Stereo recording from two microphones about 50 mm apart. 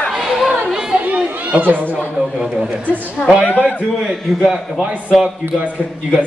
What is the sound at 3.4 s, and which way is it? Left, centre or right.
Speech, left.